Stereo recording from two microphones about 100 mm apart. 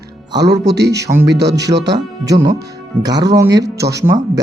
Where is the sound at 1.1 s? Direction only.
90° right.